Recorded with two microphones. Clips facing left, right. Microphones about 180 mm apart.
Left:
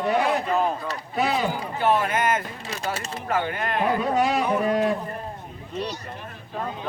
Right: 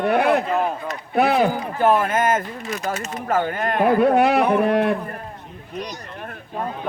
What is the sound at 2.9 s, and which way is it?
Speech, 30° left (ahead or behind).